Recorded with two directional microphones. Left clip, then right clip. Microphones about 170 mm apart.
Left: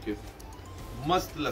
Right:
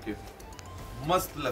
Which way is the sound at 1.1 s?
25° right (ahead or behind).